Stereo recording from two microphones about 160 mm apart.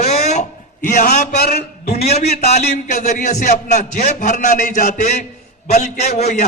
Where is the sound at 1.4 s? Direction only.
80° left.